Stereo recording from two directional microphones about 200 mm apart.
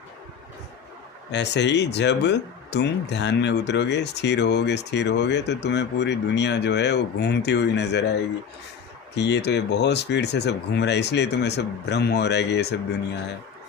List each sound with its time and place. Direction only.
1.3 s speech: 60° left (ahead or behind)